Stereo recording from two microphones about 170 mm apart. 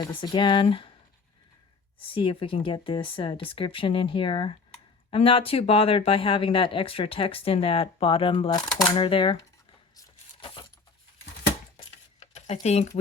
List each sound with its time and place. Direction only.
0.0 s speech: 25° left (ahead or behind)
2.0 s speech: 30° left (ahead or behind)
10.0 s chopping: 25° left (ahead or behind)
12.2 s a sound: 40° left (ahead or behind)
12.6 s speech: 40° left (ahead or behind)